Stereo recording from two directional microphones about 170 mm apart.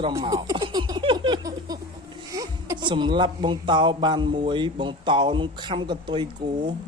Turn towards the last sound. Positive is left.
turn(degrees=-30)  # may be behind; listen again after turning